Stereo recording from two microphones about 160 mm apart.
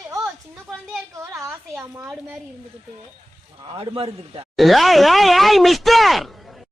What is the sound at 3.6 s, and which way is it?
Speech, 35° right (ahead or behind).